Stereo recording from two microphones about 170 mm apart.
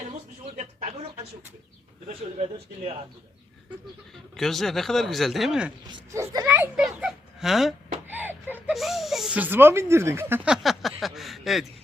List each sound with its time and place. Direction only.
0.5 s a sound: 40° right (ahead or behind)
2.0 s speech: 35° right (ahead or behind)
4.4 s speech: centre (ahead or behind)
5.9 s a child's voice: 15° right (ahead or behind)
6.7 s a sound: 5° right (ahead or behind)
8.7 s speech: centre (ahead or behind)